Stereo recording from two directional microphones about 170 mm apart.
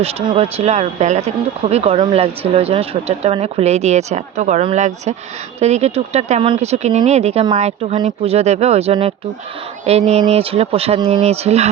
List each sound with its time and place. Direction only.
0.0 s speech: 35° right (ahead or behind)